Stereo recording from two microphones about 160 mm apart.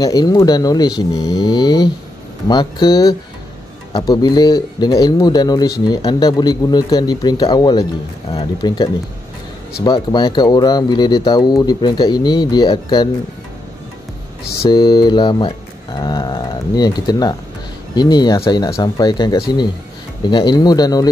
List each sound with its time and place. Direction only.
0.0 s speech: 25° left (ahead or behind)
14.6 s speech: 25° left (ahead or behind)